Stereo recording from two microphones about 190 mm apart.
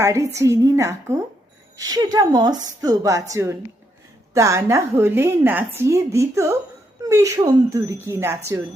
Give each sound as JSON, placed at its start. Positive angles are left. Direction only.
{"t": 0.0, "sound": "a woman's voice", "side_deg": -15}